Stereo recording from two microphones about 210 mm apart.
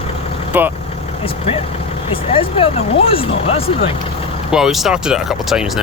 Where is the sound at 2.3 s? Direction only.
25° left (ahead or behind).